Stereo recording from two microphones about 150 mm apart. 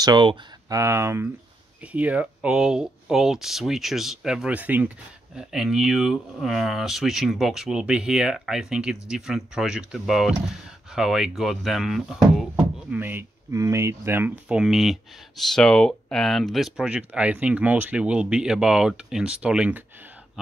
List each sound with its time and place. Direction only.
0.0 s speech: 30° right (ahead or behind)
0.7 s speech: 20° right (ahead or behind); by 12.4 s centre (ahead or behind)
12.9 s speech: 15° right (ahead or behind)
14.5 s speech: 5° right (ahead or behind)